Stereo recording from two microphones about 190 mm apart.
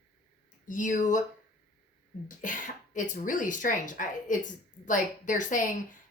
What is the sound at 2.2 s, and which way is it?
Speech, 45° left (ahead or behind).